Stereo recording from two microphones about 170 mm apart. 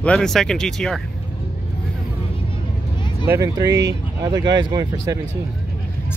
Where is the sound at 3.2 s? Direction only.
20° right (ahead or behind).